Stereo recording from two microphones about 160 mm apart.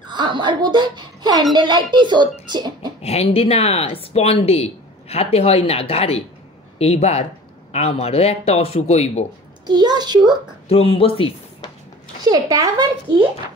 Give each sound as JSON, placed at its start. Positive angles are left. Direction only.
{"t": 0.0, "sound": "speech", "side_deg": -30}
{"t": 2.4, "sound": "a sound", "side_deg": -25}
{"t": 3.0, "sound": "speech", "side_deg": 40}
{"t": 9.7, "sound": "speech", "side_deg": -25}
{"t": 10.7, "sound": "speech", "side_deg": 35}
{"t": 12.2, "sound": "speech", "side_deg": -25}